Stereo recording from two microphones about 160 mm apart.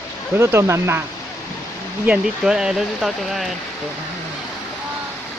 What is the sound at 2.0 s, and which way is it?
Speech, 5° right (ahead or behind).